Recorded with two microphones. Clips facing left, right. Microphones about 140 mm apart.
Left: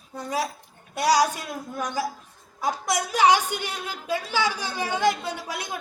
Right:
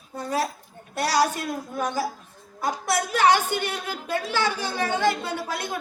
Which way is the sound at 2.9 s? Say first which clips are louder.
Even; 15° left (ahead or behind).